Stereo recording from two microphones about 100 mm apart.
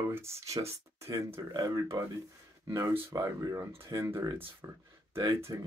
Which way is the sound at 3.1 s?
40° right (ahead or behind).